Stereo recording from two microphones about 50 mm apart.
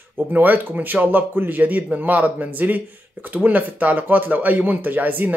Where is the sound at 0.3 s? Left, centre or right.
Right.